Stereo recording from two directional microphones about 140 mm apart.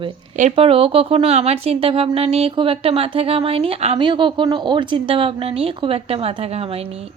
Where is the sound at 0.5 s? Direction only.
40° right (ahead or behind).